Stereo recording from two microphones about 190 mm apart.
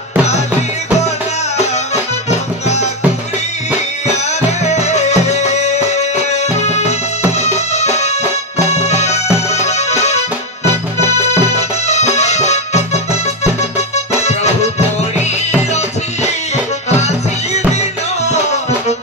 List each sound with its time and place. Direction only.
4.5 s music: 35° left (ahead or behind)
11.1 s music: 35° left (ahead or behind)